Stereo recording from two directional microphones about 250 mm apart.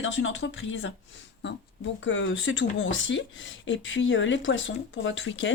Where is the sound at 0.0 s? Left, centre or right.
Left.